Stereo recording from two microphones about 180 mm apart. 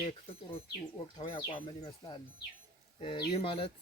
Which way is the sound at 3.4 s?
30° left (ahead or behind).